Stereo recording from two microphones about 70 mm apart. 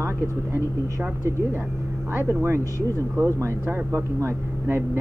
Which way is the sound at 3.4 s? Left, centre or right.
Right.